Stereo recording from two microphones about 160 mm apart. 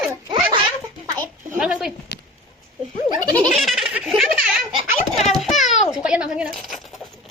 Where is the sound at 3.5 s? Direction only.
Centre (ahead or behind).